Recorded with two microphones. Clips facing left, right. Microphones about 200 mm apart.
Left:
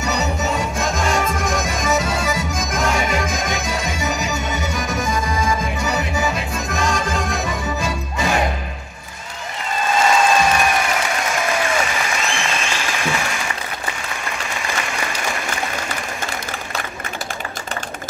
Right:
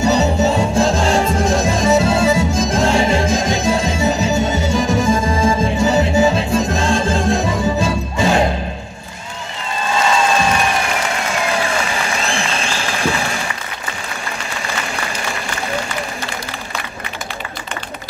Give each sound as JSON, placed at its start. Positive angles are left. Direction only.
{"t": 0.0, "sound": "music", "side_deg": -30}
{"t": 12.2, "sound": "applause", "side_deg": -35}